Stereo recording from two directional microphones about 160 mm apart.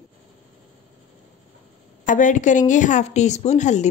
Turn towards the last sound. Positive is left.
turn(degrees=45)  # may be behind; listen again after turning